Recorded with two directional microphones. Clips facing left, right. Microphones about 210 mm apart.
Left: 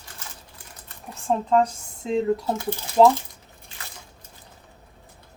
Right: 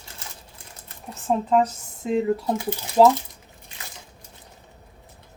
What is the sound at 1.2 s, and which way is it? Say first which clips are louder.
Speech: even; 5° right (ahead or behind).